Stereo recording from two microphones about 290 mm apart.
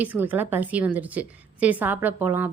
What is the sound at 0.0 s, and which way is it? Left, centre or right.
A woman's voice, centre.